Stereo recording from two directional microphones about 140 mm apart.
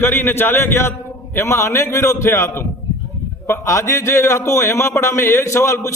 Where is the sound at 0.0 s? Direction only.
15° left (ahead or behind).